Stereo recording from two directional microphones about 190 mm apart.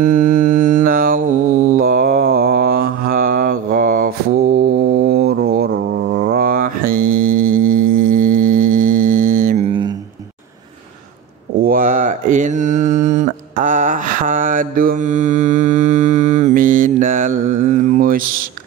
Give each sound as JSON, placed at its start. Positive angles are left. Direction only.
{"t": 0.0, "sound": "mantra", "side_deg": -45}
{"t": 9.7, "sound": "a sound", "side_deg": -25}
{"t": 11.6, "sound": "mantra", "side_deg": -45}